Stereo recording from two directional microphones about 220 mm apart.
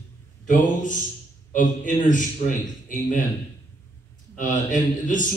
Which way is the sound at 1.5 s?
35° left (ahead or behind).